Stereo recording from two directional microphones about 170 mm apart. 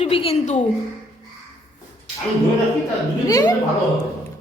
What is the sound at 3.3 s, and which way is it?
Speech, 20° left (ahead or behind).